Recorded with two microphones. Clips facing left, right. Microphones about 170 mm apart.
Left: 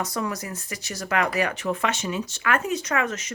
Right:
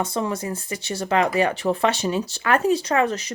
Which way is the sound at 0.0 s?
25° right (ahead or behind).